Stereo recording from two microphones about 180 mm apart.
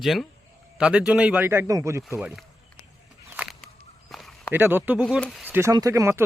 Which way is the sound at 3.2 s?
10° right (ahead or behind).